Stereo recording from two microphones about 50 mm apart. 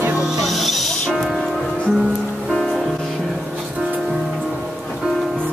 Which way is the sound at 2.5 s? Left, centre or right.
Centre.